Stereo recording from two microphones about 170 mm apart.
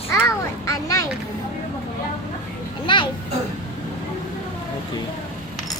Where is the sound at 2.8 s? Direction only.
30° left (ahead or behind).